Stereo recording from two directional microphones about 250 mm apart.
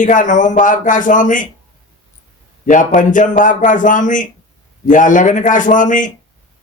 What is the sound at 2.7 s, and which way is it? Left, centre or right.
A man's voice, left.